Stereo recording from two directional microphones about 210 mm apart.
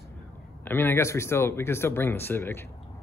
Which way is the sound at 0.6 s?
10° left (ahead or behind).